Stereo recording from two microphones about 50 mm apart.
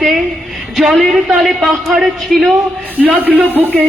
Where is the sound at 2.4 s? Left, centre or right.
Right.